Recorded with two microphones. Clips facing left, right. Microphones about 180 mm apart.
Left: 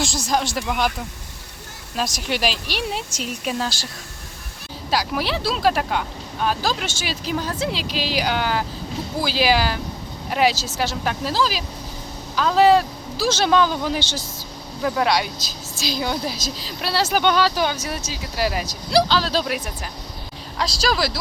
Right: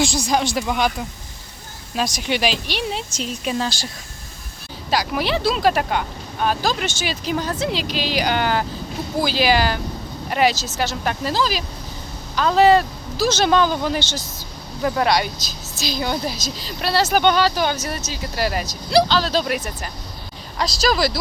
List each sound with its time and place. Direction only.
0.0 s speech: centre (ahead or behind)
2.0 s speech: 5° left (ahead or behind)
4.9 s speech: 5° left (ahead or behind)